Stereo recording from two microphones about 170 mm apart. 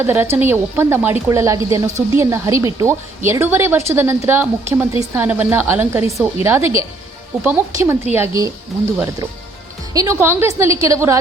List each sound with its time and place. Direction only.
0.0 s a woman's voice: 15° right (ahead or behind)
9.9 s a woman's voice: 20° right (ahead or behind)